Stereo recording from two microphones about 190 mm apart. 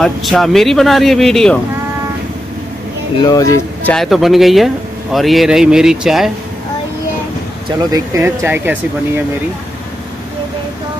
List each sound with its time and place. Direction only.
0.0 s speech: centre (ahead or behind)
3.2 s speech: 20° left (ahead or behind)
3.9 s speech: centre (ahead or behind)
7.9 s speech: 15° right (ahead or behind)